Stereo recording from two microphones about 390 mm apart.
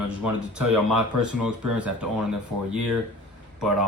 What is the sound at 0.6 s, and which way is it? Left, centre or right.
Speech, centre.